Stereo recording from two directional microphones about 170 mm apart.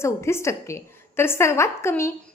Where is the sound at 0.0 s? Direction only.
15° left (ahead or behind).